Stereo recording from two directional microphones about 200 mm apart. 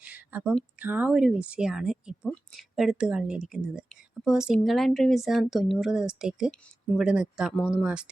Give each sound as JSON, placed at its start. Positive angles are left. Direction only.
{"t": 0.0, "sound": "speech", "side_deg": -10}